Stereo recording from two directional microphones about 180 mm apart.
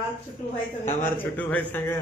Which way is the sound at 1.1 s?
10° left (ahead or behind).